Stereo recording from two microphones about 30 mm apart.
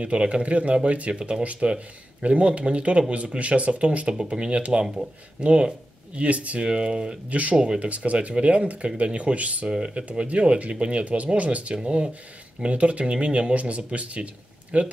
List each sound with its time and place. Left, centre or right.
0.0 s speech: right
6.3 s speech: right
6.6 s speech: right
7.2 s speech: right
7.5 s speech: right
7.8 s speech: right
9.7 s speech: right
10.0 s speech: right
11.3 s speech: right
13.0 s speech: right